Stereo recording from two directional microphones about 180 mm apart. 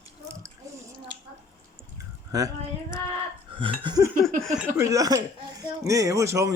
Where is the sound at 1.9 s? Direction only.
20° right (ahead or behind).